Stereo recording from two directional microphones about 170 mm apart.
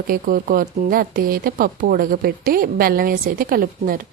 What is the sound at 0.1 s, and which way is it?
A woman's voice, 55° right (ahead or behind).